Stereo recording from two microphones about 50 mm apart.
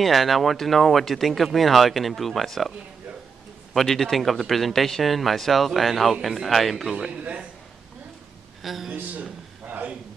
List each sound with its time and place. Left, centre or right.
0.0 s speech: centre
3.7 s speech: centre
7.1 s a man's voice: right
8.6 s speech: centre
9.7 s a sound: right